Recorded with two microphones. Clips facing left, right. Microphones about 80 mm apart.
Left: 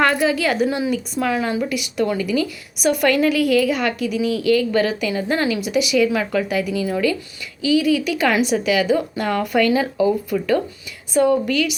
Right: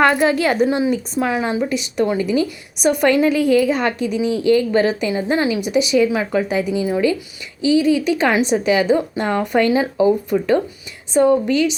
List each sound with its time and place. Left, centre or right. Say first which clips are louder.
0.2 s a woman's voice: right 3 dB; right